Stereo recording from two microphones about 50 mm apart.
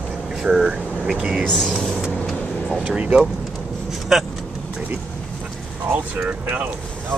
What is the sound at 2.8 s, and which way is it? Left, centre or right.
Speech, centre.